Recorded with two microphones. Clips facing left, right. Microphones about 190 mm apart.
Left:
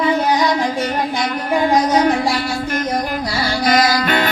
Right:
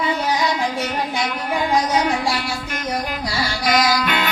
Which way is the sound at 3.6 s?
50° left (ahead or behind).